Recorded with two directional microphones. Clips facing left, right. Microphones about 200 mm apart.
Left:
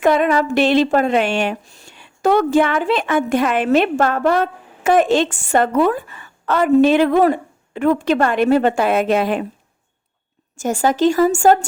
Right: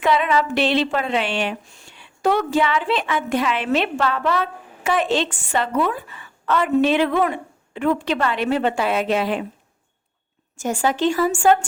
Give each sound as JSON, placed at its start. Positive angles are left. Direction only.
{"t": 0.0, "sound": "speech", "side_deg": 45}
{"t": 10.6, "sound": "speech", "side_deg": 45}